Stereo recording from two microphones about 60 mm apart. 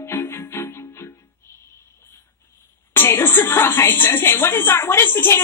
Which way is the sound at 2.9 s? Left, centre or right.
Left.